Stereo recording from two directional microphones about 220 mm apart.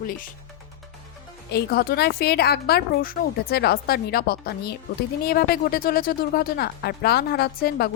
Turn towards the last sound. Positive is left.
turn(degrees=45)  # may be behind; listen again after turning